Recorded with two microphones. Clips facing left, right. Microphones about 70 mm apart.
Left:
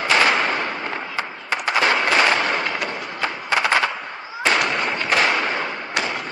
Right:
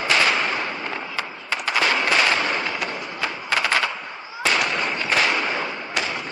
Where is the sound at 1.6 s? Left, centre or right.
Left.